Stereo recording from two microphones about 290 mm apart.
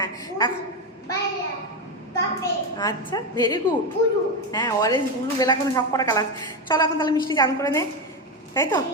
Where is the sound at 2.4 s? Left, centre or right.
Centre.